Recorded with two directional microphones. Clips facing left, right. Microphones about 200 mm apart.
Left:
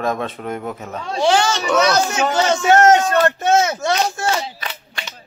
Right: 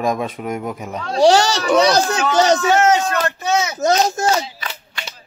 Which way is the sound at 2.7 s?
50° left (ahead or behind).